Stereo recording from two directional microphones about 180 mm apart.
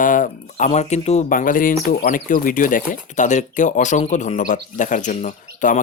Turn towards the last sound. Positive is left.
turn(degrees=45)  # may be behind; listen again after turning